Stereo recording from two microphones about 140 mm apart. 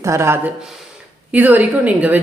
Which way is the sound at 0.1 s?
20° right (ahead or behind).